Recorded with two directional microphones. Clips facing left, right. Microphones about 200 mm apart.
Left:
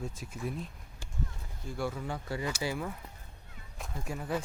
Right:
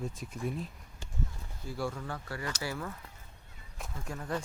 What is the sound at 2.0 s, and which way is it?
Speech, 15° left (ahead or behind).